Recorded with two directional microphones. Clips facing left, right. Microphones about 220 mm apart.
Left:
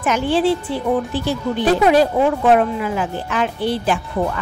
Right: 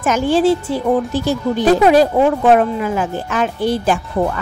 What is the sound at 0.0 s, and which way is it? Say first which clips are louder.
Speech: right 3 dB; 45° right (ahead or behind).